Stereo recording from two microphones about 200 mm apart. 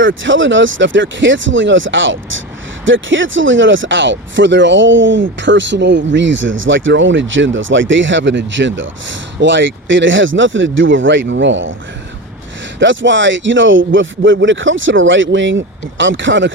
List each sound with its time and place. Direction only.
0.0 s speech: 70° right (ahead or behind)
12.8 s speech: 65° right (ahead or behind)